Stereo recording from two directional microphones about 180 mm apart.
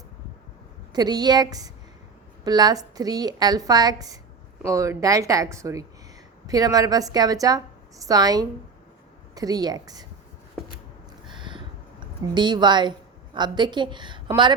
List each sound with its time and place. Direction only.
0.9 s a woman's voice: 20° right (ahead or behind)
11.3 s a sound: 25° right (ahead or behind)
13.3 s a woman's voice: 25° right (ahead or behind)